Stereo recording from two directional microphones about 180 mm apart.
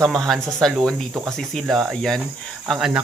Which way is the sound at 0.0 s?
Centre (ahead or behind).